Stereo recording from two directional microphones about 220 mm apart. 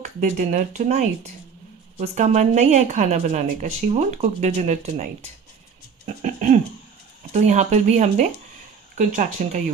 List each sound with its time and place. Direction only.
0.0 s a woman's voice: 35° right (ahead or behind)
6.2 s a sound: 35° right (ahead or behind)
7.3 s a woman's voice: 30° right (ahead or behind)